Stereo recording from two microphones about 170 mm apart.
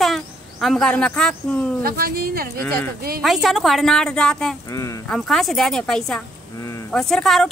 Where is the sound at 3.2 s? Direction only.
Centre (ahead or behind).